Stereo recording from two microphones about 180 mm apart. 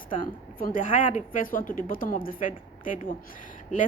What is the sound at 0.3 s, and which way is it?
A woman's voice, 50° left (ahead or behind).